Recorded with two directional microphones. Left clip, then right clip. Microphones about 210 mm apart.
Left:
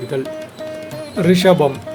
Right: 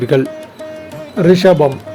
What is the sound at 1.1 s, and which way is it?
Speech, 10° right (ahead or behind).